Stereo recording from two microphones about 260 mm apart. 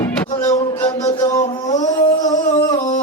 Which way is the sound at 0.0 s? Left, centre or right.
Centre.